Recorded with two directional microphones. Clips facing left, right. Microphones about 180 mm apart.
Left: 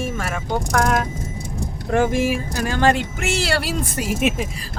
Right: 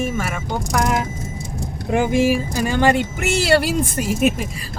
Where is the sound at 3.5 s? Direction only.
50° right (ahead or behind).